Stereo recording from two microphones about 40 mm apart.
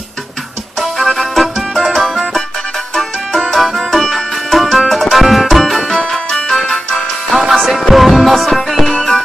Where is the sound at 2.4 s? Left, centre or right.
Centre.